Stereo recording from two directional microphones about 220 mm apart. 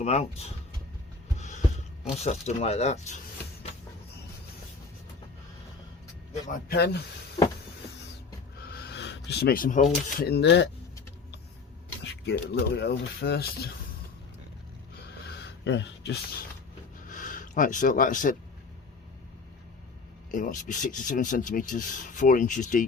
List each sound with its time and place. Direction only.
0.0 s speech: 30° left (ahead or behind)
1.4 s a sound: 30° left (ahead or behind)
2.2 s speech: 30° left (ahead or behind)
6.5 s speech: 45° left (ahead or behind)
8.6 s a sound: 45° left (ahead or behind)
9.9 s speech: 45° left (ahead or behind)
12.0 s speech: 50° left (ahead or behind)
15.3 s a sound: 55° left (ahead or behind)
17.1 s speech: 40° left (ahead or behind)
20.3 s speech: 35° left (ahead or behind)